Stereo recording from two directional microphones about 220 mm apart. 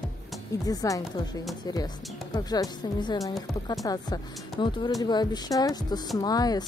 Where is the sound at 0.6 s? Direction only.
15° left (ahead or behind).